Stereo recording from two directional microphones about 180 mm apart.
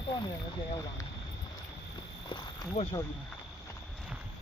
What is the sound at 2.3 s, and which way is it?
Speech, 25° left (ahead or behind).